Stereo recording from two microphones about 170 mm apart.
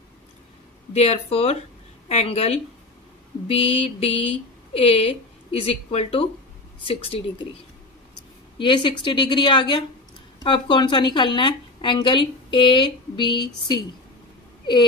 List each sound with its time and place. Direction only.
0.9 s a woman's voice: 35° left (ahead or behind)
8.5 s a woman's voice: 30° left (ahead or behind)